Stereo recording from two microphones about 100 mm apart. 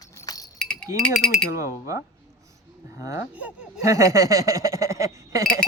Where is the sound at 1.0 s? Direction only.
5° left (ahead or behind).